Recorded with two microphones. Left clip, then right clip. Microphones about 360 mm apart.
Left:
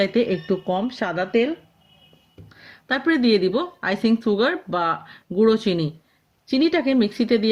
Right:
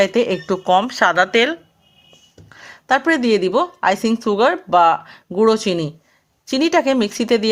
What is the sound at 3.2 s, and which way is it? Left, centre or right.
Speech, centre.